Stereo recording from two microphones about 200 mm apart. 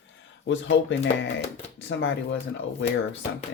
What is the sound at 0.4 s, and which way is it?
Speech, 65° left (ahead or behind).